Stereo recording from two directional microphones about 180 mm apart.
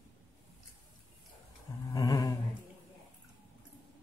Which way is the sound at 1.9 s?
20° left (ahead or behind).